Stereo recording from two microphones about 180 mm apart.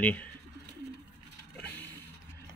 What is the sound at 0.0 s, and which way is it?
Speech, 10° left (ahead or behind).